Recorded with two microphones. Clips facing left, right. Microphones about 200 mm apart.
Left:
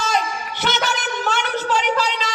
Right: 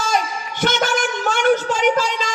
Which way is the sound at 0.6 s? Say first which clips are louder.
Right 5 dB; 45° right (ahead or behind).